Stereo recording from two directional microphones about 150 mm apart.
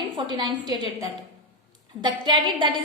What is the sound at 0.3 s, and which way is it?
Speech, 25° right (ahead or behind).